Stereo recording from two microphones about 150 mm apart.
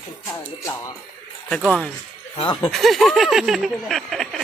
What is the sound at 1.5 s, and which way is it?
Snicker, 5° left (ahead or behind).